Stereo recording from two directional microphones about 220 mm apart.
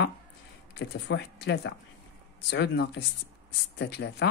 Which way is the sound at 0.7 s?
50° left (ahead or behind).